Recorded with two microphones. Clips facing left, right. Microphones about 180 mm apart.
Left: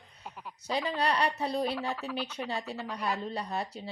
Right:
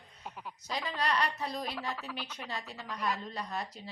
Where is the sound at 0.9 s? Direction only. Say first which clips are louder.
Left 2 dB; 30° left (ahead or behind).